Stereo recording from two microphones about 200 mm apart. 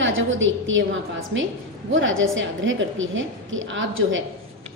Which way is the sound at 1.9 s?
75° right (ahead or behind).